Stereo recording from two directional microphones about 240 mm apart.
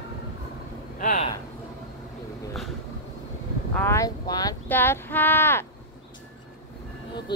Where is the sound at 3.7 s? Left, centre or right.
Centre.